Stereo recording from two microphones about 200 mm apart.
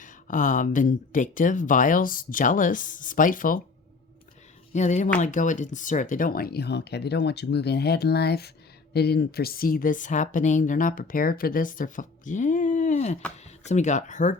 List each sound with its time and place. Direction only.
0.0 s speech: 40° left (ahead or behind)
4.7 s speech: 35° left (ahead or behind)